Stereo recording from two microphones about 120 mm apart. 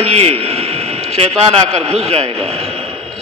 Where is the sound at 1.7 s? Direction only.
60° right (ahead or behind).